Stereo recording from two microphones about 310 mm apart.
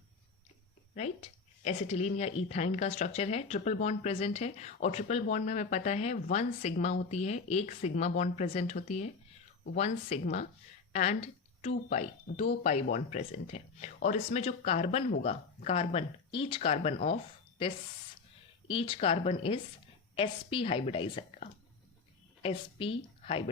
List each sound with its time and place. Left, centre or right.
0.9 s speech: left
18.7 s a woman's voice: centre